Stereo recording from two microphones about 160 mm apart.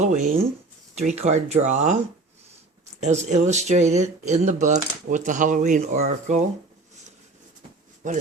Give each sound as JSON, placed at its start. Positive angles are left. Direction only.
{"t": 0.0, "sound": "speech", "side_deg": -45}
{"t": 3.0, "sound": "speech", "side_deg": -45}
{"t": 8.0, "sound": "speech", "side_deg": -50}